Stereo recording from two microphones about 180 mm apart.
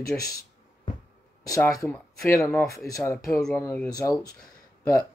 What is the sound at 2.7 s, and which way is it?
Speech, 15° left (ahead or behind).